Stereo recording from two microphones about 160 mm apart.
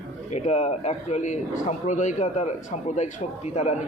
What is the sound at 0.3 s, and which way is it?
A man's voice, 45° left (ahead or behind).